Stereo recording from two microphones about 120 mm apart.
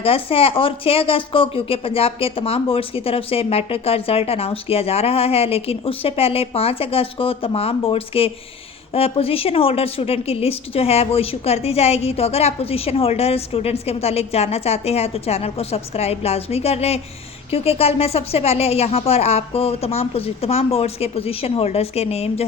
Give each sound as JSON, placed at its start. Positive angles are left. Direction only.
{"t": 0.0, "sound": "a woman's voice", "side_deg": 50}